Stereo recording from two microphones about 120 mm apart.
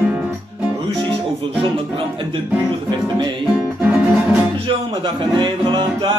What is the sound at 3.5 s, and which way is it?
Music, 10° right (ahead or behind).